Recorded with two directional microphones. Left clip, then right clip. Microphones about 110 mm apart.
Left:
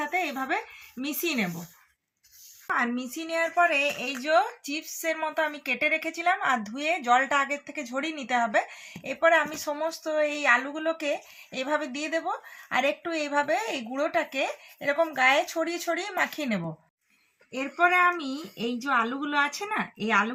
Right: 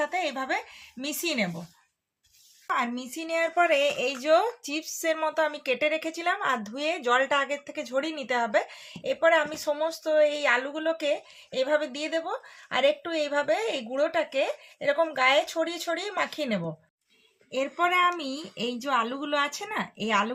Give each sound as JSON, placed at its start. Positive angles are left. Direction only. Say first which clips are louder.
{"t": 0.0, "sound": "a woman's voice", "louder": "even", "side_deg": -20}
{"t": 2.6, "sound": "a woman's voice", "louder": "left 1 dB", "side_deg": -30}
{"t": 3.2, "sound": "speech", "louder": "even", "side_deg": -55}
{"t": 5.0, "sound": "a woman's voice", "louder": "right 2 dB", "side_deg": -60}
{"t": 17.7, "sound": "a woman's voice", "louder": "left 3 dB", "side_deg": -30}